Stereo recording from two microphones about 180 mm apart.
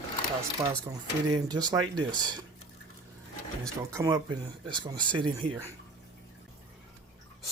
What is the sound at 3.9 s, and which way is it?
Speech, 20° right (ahead or behind).